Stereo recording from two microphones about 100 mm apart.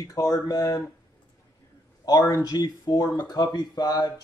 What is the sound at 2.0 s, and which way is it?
Speech, 40° left (ahead or behind).